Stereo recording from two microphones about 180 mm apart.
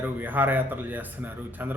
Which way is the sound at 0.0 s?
10° right (ahead or behind).